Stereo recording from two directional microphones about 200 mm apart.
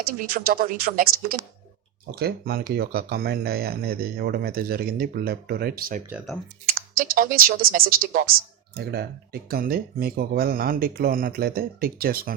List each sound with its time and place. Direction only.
0.2 s speech: 45° right (ahead or behind)
6.1 s speech: centre (ahead or behind)
6.9 s speech: 45° right (ahead or behind)